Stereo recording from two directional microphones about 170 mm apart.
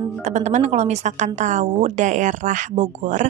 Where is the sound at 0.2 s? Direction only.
45° right (ahead or behind).